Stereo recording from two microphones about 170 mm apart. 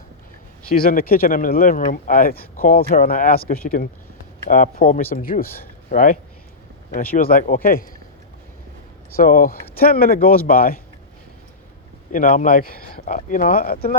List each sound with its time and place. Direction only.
0.8 s speech: 60° left (ahead or behind)
9.1 s speech: 60° left (ahead or behind)
12.1 s speech: 55° left (ahead or behind)